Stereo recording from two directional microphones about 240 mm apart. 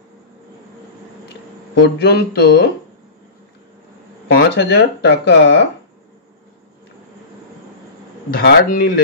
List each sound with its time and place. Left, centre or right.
1.8 s speech: left
4.4 s speech: left
8.3 s a man's voice: left